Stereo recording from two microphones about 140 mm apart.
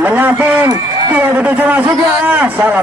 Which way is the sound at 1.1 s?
15° right (ahead or behind).